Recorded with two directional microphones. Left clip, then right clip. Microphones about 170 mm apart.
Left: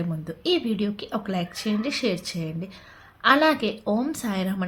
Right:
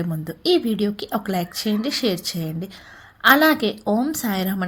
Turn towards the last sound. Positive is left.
turn(degrees=-25)  # may be behind; listen again after turning